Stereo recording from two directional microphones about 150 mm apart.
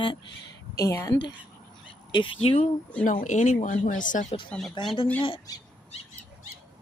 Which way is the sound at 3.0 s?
55° left (ahead or behind).